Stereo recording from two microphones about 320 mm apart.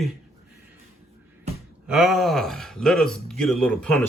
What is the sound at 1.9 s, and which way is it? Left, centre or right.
A man's voice, centre.